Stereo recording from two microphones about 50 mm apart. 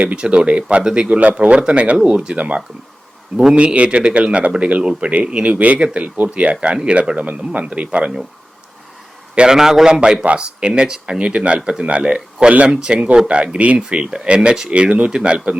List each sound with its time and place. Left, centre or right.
0.2 s speech: right
9.3 s a man's voice: right
9.6 s a man's voice: centre